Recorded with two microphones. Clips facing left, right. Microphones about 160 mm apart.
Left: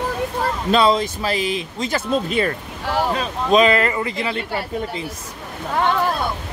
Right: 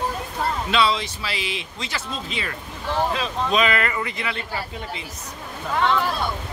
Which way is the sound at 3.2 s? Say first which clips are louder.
Left 6 dB; 35° left (ahead or behind).